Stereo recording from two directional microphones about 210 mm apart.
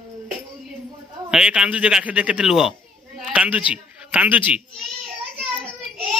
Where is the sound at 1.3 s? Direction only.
5° right (ahead or behind).